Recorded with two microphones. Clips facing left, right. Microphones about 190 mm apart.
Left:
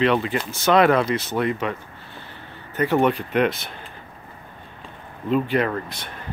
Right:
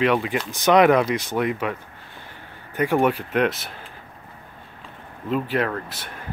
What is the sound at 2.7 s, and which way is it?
Speech, 10° right (ahead or behind).